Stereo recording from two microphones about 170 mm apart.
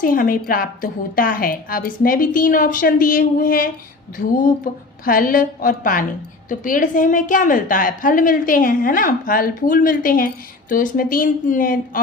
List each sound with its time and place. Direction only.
0.0 s a woman's voice: 55° left (ahead or behind)